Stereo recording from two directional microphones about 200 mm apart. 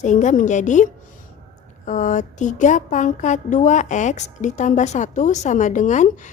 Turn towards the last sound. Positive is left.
turn(degrees=40)  # may be behind; listen again after turning